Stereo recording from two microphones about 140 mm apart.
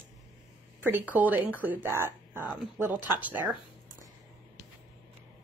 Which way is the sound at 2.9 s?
30° left (ahead or behind).